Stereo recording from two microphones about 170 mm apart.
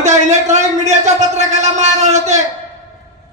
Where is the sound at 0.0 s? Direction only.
45° right (ahead or behind).